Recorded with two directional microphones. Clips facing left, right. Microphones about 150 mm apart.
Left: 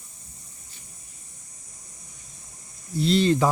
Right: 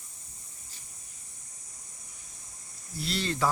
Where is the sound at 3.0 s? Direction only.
20° left (ahead or behind).